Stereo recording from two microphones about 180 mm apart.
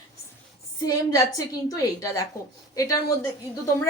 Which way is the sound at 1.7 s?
15° left (ahead or behind).